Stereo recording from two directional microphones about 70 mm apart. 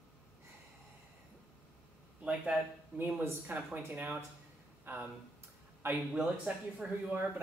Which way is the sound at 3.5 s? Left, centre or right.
Right.